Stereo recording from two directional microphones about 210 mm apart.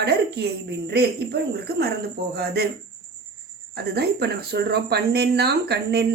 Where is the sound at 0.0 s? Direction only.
50° right (ahead or behind).